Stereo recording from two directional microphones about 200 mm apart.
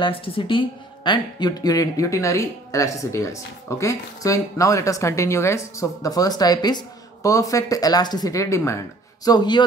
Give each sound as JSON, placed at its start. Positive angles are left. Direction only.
{"t": 0.0, "sound": "speech", "side_deg": 25}